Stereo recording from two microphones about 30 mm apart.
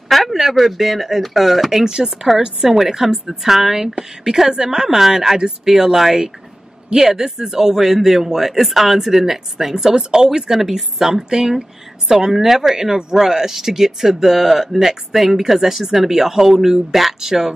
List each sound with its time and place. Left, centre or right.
0.1 s a sound: centre
0.4 s speech: centre
1.9 s speech: right
3.9 s speech: right
9.9 s speech: right